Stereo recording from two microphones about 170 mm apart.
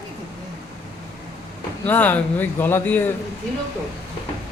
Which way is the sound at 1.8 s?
10° left (ahead or behind).